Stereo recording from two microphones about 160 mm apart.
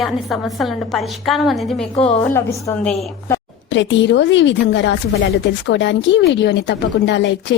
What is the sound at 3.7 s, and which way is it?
A woman's voice, 90° left.